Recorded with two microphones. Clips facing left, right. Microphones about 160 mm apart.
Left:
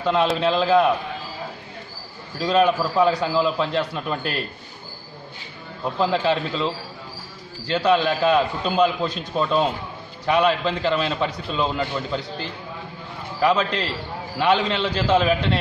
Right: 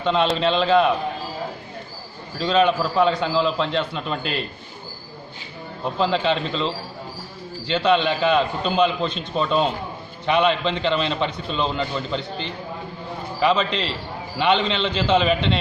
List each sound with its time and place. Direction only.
0.0 s a man's voice: 5° left (ahead or behind)
2.4 s a man's voice: 5° left (ahead or behind)
5.9 s a man's voice: 5° left (ahead or behind)
7.7 s a man's voice: 5° left (ahead or behind)
9.0 s a man's voice: 25° right (ahead or behind)
9.3 s a man's voice: 10° left (ahead or behind)
13.4 s a man's voice: centre (ahead or behind)